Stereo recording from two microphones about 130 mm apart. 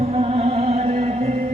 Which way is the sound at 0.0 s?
55° right (ahead or behind).